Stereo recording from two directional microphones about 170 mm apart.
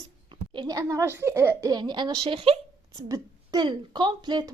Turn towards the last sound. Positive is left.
turn(degrees=-25)  # may be behind; listen again after turning